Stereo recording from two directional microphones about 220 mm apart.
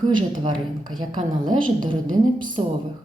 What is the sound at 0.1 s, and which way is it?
A woman's voice, 20° right (ahead or behind).